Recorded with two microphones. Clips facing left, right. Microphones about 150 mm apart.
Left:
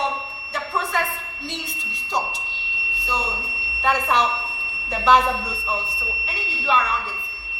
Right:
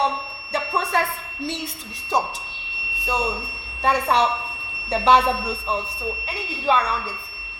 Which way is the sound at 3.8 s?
35° right (ahead or behind).